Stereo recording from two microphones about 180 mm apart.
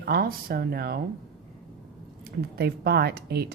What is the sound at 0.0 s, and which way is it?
Speech, 55° right (ahead or behind).